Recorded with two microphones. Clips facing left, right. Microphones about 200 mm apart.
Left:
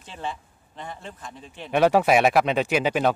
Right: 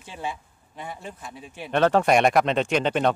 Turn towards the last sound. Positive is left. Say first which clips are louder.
# even
turn(degrees=5)  # may be behind; listen again after turning